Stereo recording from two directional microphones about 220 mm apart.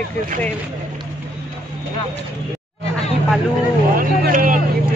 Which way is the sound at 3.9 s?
40° right (ahead or behind).